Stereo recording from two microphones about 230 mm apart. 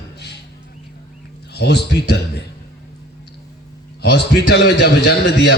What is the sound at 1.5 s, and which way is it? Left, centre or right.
Speech, left.